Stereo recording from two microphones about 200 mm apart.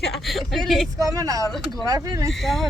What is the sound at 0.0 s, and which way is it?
Speech, centre (ahead or behind).